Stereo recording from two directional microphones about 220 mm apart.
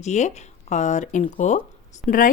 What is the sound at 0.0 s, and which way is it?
A woman's voice, 30° left (ahead or behind).